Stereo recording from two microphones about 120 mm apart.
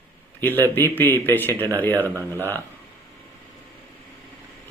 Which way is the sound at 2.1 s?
25° right (ahead or behind).